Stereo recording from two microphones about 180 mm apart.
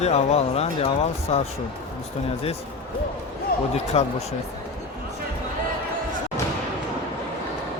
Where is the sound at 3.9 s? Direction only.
35° left (ahead or behind).